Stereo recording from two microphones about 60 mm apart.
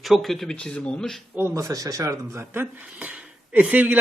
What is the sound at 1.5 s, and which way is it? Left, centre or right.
Speech, right.